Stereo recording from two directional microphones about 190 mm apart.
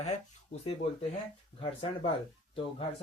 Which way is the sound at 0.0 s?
35° left (ahead or behind).